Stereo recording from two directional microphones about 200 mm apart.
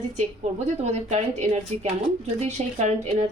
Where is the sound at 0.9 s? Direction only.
35° right (ahead or behind).